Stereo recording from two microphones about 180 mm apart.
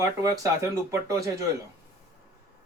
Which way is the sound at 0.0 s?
15° right (ahead or behind).